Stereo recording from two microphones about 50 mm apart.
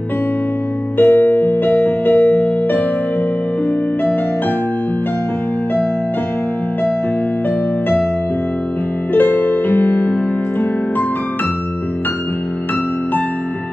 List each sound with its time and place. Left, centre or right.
0.9 s music: left
9.1 s music: left